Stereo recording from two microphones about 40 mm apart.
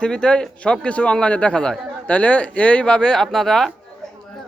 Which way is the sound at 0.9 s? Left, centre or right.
Left.